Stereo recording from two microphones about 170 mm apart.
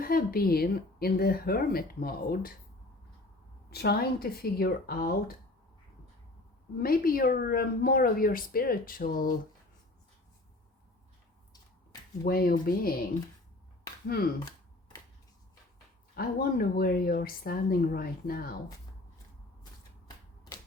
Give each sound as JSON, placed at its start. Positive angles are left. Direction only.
{"t": 0.0, "sound": "speech", "side_deg": 60}
{"t": 3.7, "sound": "speech", "side_deg": 65}
{"t": 6.7, "sound": "speech", "side_deg": 60}
{"t": 12.2, "sound": "speech", "side_deg": 60}
{"t": 16.1, "sound": "speech", "side_deg": 60}